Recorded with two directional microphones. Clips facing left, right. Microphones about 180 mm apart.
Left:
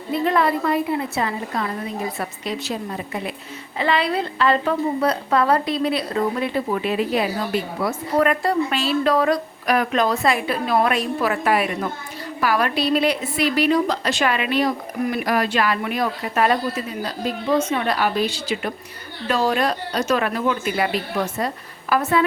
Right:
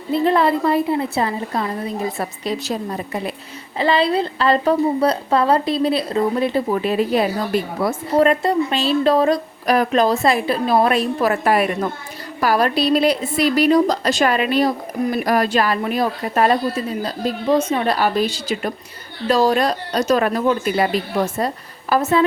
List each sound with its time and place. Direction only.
0.1 s a woman's voice: 30° right (ahead or behind)
3.8 s a woman's voice: 30° right (ahead or behind)
8.1 s a woman's voice: 25° right (ahead or behind)